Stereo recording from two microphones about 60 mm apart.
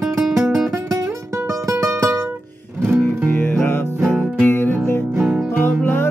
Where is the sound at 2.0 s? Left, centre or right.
Right.